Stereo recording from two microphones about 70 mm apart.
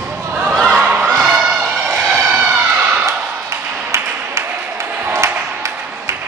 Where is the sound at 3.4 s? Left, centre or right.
Right.